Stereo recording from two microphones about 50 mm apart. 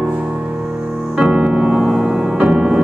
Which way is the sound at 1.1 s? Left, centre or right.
Centre.